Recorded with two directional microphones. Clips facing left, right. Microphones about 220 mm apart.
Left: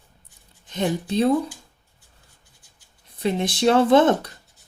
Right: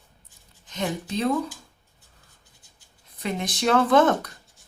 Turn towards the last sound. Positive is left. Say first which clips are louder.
# left 3 dB
turn(degrees=25)  # may be behind; listen again after turning